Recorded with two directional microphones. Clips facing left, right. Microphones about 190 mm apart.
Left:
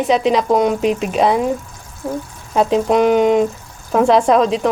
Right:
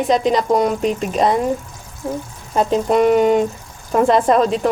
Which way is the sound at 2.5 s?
Centre (ahead or behind).